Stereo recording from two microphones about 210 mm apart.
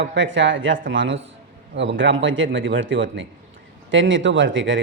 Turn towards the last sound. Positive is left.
turn(degrees=-65)  # may be behind; listen again after turning